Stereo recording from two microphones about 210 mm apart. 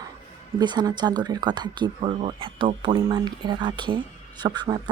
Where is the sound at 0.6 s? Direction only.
20° right (ahead or behind).